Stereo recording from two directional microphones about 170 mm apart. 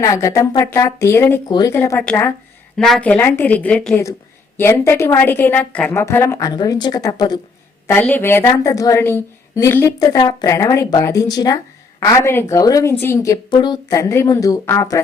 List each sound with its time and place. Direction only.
0.0 s a woman's voice: 20° left (ahead or behind)
7.9 s a woman's voice: 10° left (ahead or behind)